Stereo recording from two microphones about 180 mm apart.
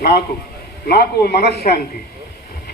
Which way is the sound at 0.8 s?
60° left (ahead or behind).